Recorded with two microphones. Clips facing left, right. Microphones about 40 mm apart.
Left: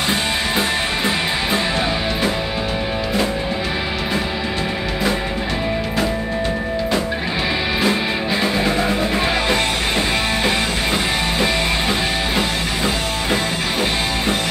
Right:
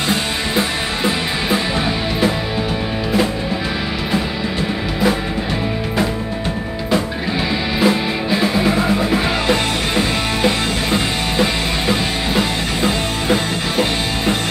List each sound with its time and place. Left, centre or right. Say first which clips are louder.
0.6 s music: right 1 dB; centre
7.8 s music: right 5 dB; centre
10.4 s music: right 1 dB; centre